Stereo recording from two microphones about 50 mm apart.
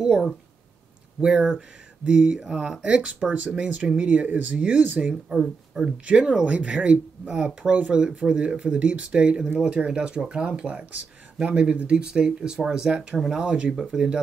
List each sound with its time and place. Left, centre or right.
1.2 s speech: centre; by 5.1 s right
5.3 s speech: centre
6.0 s speech: right